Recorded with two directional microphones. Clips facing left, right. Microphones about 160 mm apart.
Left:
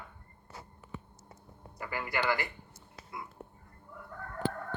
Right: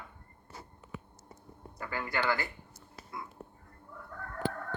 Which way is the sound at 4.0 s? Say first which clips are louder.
Left 1 dB; 20° left (ahead or behind).